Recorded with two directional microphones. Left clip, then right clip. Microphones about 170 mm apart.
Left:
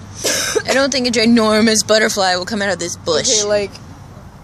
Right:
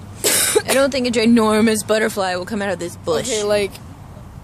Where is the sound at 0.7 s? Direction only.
5° right (ahead or behind).